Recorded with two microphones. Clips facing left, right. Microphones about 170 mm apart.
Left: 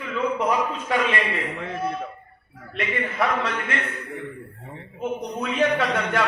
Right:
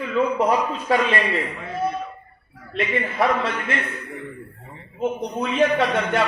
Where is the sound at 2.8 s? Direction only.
30° right (ahead or behind).